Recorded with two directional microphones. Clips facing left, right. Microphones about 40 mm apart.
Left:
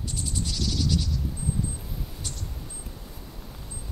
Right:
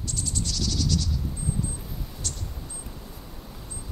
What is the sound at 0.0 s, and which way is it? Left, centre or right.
Cricket, centre.